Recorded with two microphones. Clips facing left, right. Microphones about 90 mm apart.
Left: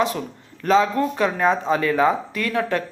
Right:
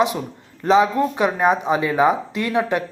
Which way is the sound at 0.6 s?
20° right (ahead or behind).